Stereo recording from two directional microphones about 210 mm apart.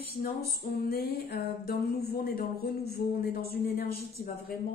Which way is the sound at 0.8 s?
45° left (ahead or behind).